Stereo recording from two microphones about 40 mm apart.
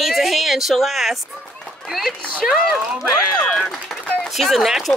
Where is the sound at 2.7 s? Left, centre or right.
Centre.